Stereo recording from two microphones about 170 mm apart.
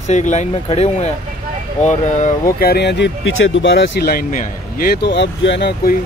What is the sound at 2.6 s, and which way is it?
Speech, 70° left (ahead or behind).